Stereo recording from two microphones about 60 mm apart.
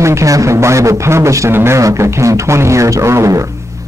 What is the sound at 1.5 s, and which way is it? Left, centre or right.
Speech, right.